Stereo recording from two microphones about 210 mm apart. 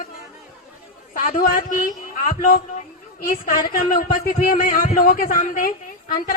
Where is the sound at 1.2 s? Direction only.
40° left (ahead or behind).